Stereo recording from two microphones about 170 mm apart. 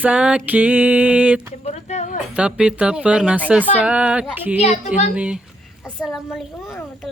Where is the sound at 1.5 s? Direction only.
40° left (ahead or behind).